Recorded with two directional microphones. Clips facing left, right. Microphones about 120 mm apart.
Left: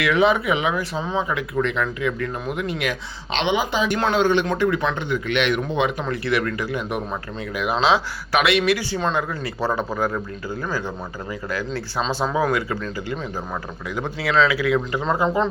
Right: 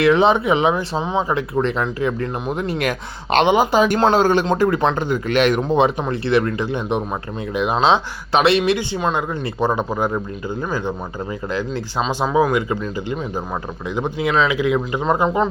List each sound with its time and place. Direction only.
0.0 s speech: 30° right (ahead or behind)
9.0 s speech: 10° right (ahead or behind)